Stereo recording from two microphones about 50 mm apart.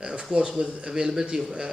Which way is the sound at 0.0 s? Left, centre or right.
Centre.